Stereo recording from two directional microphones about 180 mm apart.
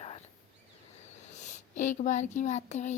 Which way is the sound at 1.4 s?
40° left (ahead or behind).